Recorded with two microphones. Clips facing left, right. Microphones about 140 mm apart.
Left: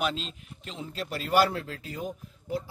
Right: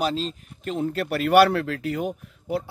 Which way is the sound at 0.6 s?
55° right (ahead or behind).